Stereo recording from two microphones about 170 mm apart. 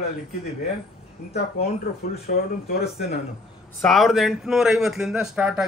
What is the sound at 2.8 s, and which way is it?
Speech, 75° left (ahead or behind).